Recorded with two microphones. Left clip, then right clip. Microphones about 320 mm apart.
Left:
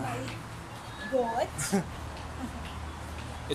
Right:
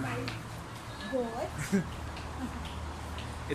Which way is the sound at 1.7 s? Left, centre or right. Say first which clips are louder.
Left 2 dB; left.